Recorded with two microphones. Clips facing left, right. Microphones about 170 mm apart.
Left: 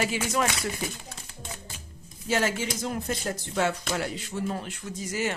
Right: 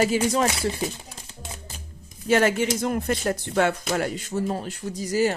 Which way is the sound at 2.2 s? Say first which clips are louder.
Right 7 dB; 60° right (ahead or behind).